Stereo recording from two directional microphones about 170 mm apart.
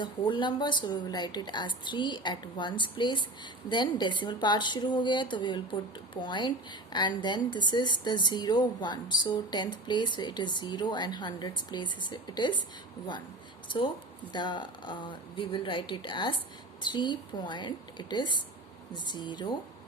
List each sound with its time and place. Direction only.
0.0 s a woman's voice: 30° left (ahead or behind)
13.7 s a woman's voice: 30° left (ahead or behind)